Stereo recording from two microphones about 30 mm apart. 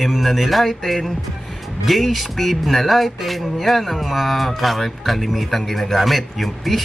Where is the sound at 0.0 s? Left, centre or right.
Centre.